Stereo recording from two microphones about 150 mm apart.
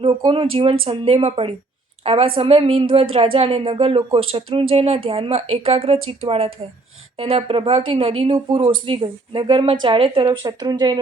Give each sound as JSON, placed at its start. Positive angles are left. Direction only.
{"t": 0.3, "sound": "a woman's voice", "side_deg": -35}